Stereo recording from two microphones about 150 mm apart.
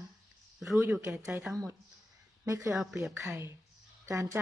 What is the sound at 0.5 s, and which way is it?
Speech, centre (ahead or behind).